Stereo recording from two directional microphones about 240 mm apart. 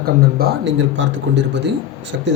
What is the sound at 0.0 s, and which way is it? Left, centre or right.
A man's voice, right.